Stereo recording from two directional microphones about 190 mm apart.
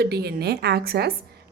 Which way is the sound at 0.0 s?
60° right (ahead or behind).